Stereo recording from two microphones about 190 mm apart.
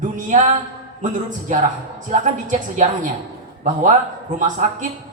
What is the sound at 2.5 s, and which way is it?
Speech, 40° right (ahead or behind).